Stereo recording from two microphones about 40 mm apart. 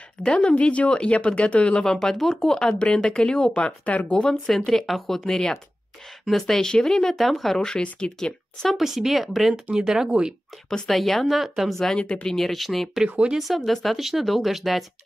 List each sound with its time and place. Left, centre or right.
0.2 s speech: left
1.8 s speech: centre
3.8 s speech: left
4.1 s speech: left
4.5 s speech: centre
7.2 s speech: centre
7.5 s speech: centre
8.7 s speech: centre
10.0 s speech: right
10.9 s speech: centre
12.0 s speech: left
12.3 s speech: centre